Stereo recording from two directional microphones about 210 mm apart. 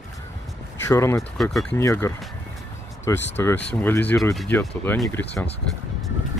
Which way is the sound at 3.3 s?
10° left (ahead or behind).